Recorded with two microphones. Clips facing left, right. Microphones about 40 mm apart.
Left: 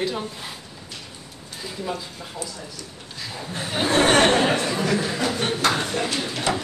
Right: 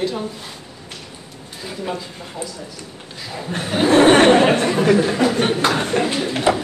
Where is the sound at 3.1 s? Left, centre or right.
Centre.